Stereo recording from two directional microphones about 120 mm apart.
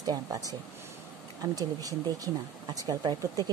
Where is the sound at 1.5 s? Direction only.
30° right (ahead or behind).